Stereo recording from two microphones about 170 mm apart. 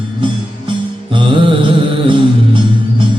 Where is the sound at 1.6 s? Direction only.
30° right (ahead or behind).